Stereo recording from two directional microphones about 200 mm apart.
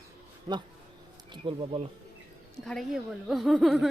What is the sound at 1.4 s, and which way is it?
Speech, 25° right (ahead or behind).